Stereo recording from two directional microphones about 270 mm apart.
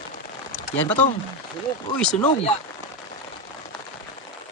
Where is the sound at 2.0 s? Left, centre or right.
Centre.